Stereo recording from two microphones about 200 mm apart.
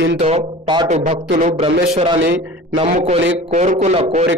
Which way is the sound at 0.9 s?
40° right (ahead or behind).